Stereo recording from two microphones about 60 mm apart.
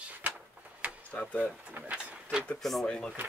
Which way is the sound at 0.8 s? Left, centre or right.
Right.